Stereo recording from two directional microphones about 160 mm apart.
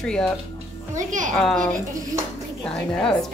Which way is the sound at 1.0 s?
50° right (ahead or behind).